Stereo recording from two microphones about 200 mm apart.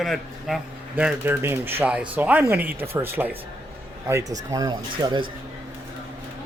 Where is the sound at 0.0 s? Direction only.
Centre (ahead or behind); by 5.2 s 20° right (ahead or behind).